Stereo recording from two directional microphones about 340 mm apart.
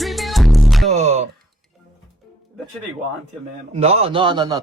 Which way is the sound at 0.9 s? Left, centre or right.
Centre.